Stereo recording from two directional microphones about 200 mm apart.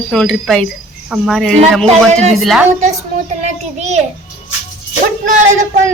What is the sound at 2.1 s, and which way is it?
Speech, 35° right (ahead or behind).